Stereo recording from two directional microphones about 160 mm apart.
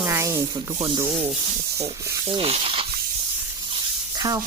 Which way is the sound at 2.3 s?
35° right (ahead or behind).